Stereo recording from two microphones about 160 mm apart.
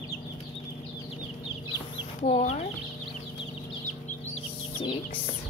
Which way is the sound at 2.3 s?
45° left (ahead or behind).